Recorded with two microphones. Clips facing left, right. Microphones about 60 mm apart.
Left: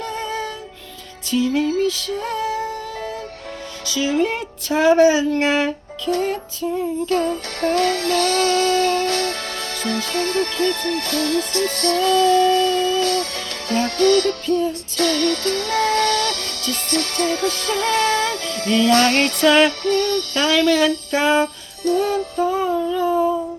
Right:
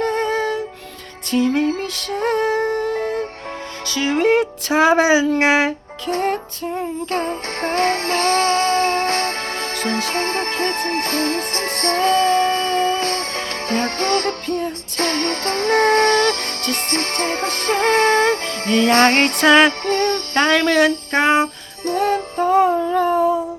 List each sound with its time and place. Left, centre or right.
0.0 s music: right
6.1 s music: right